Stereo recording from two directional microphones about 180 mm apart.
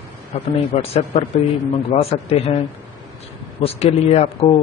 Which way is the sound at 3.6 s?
35° left (ahead or behind).